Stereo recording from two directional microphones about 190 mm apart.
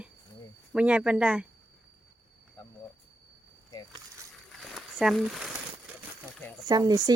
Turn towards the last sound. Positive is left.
turn(degrees=-20)  # may be behind; listen again after turning